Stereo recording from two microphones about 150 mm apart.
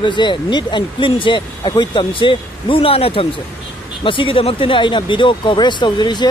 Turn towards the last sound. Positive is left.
turn(degrees=30)  # may be behind; listen again after turning